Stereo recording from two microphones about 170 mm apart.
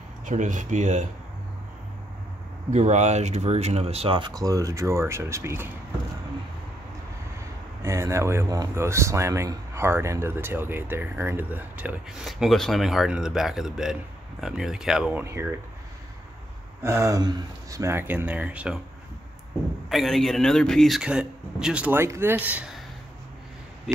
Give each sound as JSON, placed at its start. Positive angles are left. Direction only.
{"t": 0.2, "sound": "speech", "side_deg": -45}
{"t": 2.7, "sound": "speech", "side_deg": -40}
{"t": 7.8, "sound": "a man's voice", "side_deg": -15}
{"t": 16.8, "sound": "speech", "side_deg": -15}
{"t": 19.9, "sound": "a man's voice", "side_deg": 0}